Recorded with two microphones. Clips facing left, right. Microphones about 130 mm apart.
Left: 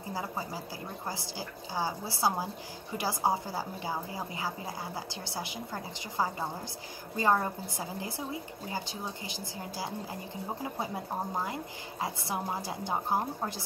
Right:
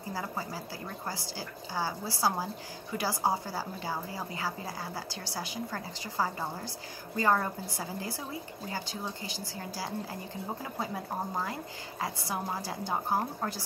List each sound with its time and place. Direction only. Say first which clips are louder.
0.1 s a woman's voice: even; 20° left (ahead or behind)
11.4 s a woman's voice: left 1 dB; 20° left (ahead or behind)